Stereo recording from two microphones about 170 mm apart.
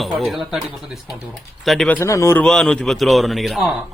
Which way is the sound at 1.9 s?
20° left (ahead or behind).